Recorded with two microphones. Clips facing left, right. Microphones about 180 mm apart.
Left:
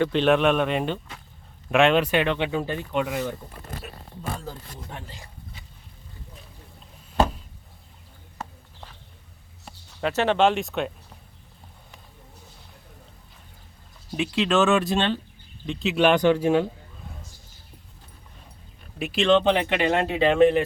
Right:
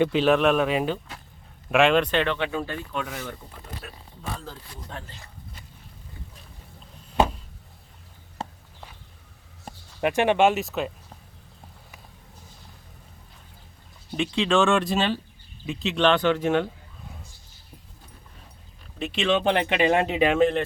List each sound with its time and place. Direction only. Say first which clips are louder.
0.1 s speech: even; centre (ahead or behind); by 3.3 s 15° left (ahead or behind)
4.9 s speech: right 2 dB; 15° left (ahead or behind)
8.4 s a sound: right 2 dB; 30° right (ahead or behind)
9.7 s a sound: right 4 dB; 45° right (ahead or behind)
10.0 s speech: right 1 dB; 15° right (ahead or behind)
14.1 s speech: even; 5° left (ahead or behind)
18.9 s speech: left 2 dB; 10° left (ahead or behind)
19.2 s speech: left 3 dB; 5° right (ahead or behind)
20.4 s speech: left 7 dB; 5° left (ahead or behind)